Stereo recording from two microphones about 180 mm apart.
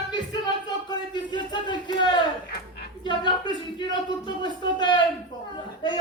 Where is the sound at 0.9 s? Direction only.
25° left (ahead or behind).